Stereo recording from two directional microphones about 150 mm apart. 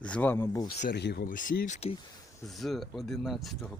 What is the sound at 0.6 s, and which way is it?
Speech, 80° left.